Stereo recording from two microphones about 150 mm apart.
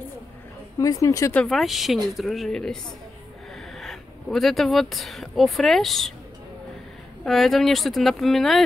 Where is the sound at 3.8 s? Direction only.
Centre (ahead or behind).